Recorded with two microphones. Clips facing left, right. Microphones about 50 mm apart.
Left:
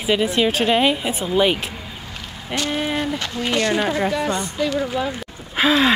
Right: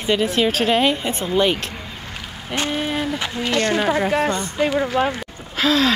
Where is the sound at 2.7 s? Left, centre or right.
Centre.